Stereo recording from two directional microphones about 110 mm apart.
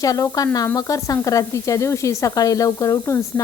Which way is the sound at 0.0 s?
30° left (ahead or behind).